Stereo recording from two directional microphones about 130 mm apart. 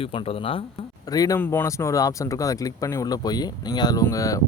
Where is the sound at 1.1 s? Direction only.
25° left (ahead or behind).